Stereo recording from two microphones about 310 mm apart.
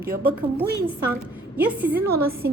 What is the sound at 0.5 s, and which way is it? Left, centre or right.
Speech, centre.